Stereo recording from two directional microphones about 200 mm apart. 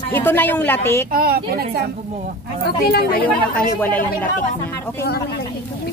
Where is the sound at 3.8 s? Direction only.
10° left (ahead or behind).